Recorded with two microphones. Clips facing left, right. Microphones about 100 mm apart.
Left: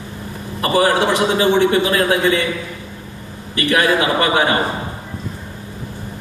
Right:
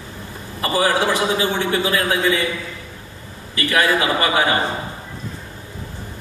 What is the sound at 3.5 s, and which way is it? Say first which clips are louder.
A man's voice: left 2 dB; 25° left (ahead or behind).